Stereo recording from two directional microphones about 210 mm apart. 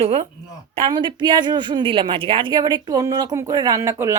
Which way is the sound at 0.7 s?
20° right (ahead or behind).